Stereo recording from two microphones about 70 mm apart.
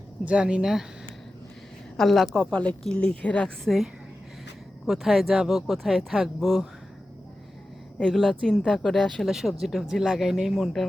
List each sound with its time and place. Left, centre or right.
0.3 s speech: centre
2.0 s speech: centre
2.5 s speech: centre
3.6 s speech: centre
4.9 s speech: centre
7.9 s speech: centre